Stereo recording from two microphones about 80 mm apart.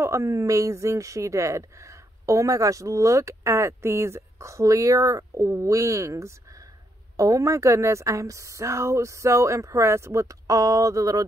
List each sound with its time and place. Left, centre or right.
0.0 s speech: right